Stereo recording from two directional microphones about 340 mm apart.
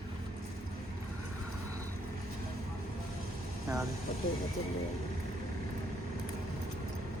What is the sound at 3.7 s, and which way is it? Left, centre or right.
Vehicle, centre.